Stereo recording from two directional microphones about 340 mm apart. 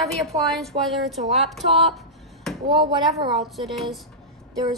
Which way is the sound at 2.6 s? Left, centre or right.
Centre.